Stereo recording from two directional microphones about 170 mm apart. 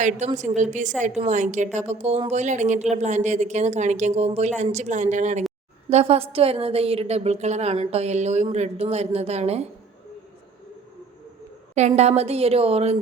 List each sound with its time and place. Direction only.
0.0 s a woman's voice: 45° right (ahead or behind)
11.7 s a woman's voice: 40° right (ahead or behind)